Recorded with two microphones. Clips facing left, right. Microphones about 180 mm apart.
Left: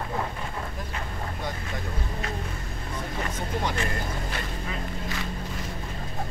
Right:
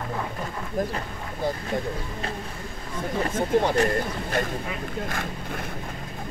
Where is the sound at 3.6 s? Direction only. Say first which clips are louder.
Right 7 dB; 40° right (ahead or behind); by 5.7 s 55° right (ahead or behind).